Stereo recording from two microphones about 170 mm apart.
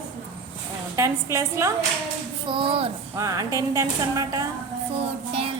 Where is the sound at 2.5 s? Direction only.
30° right (ahead or behind).